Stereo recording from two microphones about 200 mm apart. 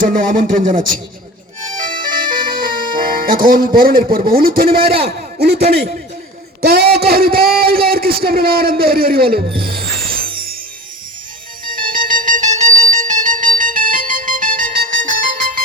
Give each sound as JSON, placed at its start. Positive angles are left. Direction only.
{"t": 0.0, "sound": "a man's voice", "side_deg": -45}
{"t": 1.8, "sound": "music", "side_deg": -45}
{"t": 4.3, "sound": "a man's voice", "side_deg": -45}
{"t": 9.5, "sound": "music", "side_deg": -25}
{"t": 9.7, "sound": "music", "side_deg": -45}
{"t": 11.6, "sound": "music", "side_deg": -45}